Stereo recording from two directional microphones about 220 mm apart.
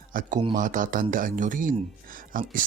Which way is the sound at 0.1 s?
40° right (ahead or behind).